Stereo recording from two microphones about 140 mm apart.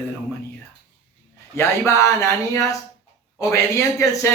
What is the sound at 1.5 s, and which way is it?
Speech, 20° left (ahead or behind).